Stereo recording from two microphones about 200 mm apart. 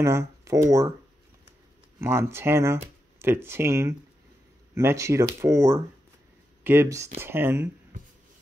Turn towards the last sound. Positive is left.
turn(degrees=-10)  # may be behind; listen again after turning